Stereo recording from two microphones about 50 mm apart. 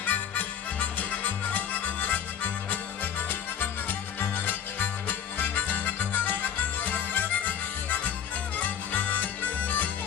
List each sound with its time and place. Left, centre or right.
0.0 s music: left